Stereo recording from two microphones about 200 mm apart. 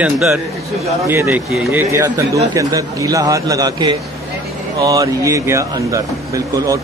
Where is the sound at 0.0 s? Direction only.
5° right (ahead or behind).